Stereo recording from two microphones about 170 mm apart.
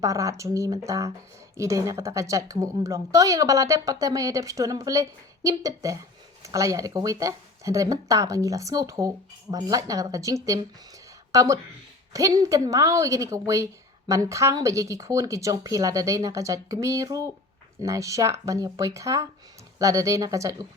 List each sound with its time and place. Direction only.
0.0 s a woman's voice: 20° right (ahead or behind)